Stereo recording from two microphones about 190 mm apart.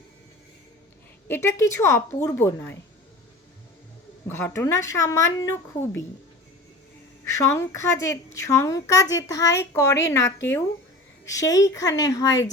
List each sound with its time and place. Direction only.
1.3 s a woman's voice: 15° left (ahead or behind)
4.3 s a woman's voice: 10° left (ahead or behind)
7.3 s a woman's voice: 15° left (ahead or behind)